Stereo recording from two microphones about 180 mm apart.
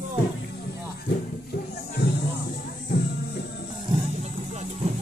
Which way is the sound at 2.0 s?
65° left (ahead or behind).